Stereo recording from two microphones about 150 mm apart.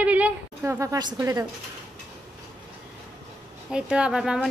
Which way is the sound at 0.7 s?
25° right (ahead or behind).